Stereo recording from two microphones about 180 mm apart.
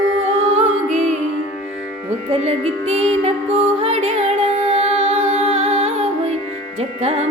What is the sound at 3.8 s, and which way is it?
Music, 35° right (ahead or behind).